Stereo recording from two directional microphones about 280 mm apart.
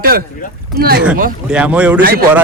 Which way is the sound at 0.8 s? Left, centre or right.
Right.